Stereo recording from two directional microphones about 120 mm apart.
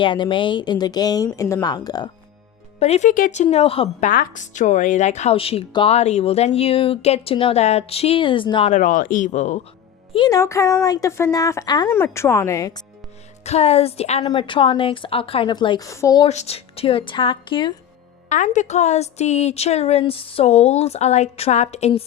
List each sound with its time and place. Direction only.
0.0 s speech: 45° left (ahead or behind)
2.7 s a woman's voice: 60° left (ahead or behind)
4.0 s speech: 90° left; by 5.6 s 55° left (ahead or behind)
5.9 s a woman's voice: 65° left (ahead or behind)
7.6 s a woman's voice: 65° left (ahead or behind); by 8.7 s 45° left (ahead or behind)
8.7 s speech: 90° left
10.2 s speech: 30° left (ahead or behind)
11.9 s speech: 20° left (ahead or behind)
13.4 s a woman's voice: 60° left (ahead or behind)
14.3 s a woman's voice: 45° left (ahead or behind)
15.8 s speech: 25° left (ahead or behind)
16.3 s a woman's voice: 65° left (ahead or behind); by 17.7 s 45° left (ahead or behind)
18.3 s a woman's voice: 90° left; by 22.0 s 60° left (ahead or behind)